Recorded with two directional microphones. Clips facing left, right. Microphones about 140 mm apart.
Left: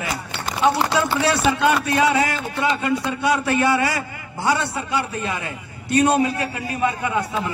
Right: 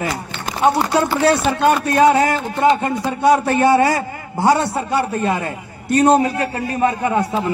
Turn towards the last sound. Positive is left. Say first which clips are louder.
# right 5 dB
turn(degrees=-40)  # may be behind; listen again after turning